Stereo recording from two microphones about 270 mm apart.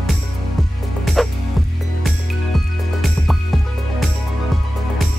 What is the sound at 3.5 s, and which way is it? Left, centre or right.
Music, centre.